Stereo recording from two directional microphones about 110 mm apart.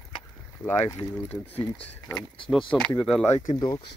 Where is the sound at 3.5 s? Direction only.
40° left (ahead or behind).